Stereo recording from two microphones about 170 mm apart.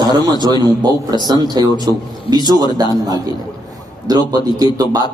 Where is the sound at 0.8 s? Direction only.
25° right (ahead or behind).